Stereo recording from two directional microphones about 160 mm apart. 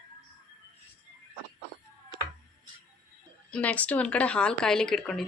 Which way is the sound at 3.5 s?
10° left (ahead or behind).